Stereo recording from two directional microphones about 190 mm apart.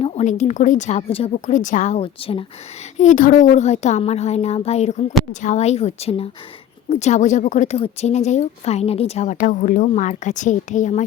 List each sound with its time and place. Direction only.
0.0 s a woman's voice: 35° left (ahead or behind)
3.0 s a woman's voice: 40° left (ahead or behind)